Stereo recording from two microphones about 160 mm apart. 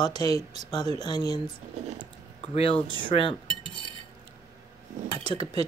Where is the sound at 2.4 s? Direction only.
35° left (ahead or behind).